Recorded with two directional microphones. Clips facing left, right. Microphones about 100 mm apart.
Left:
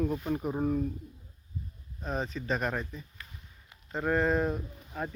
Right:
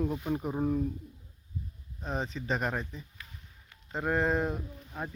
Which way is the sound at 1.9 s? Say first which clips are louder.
Left 1 dB; 15° right (ahead or behind).